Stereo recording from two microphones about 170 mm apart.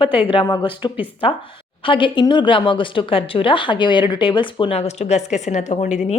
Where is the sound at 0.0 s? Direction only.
30° left (ahead or behind).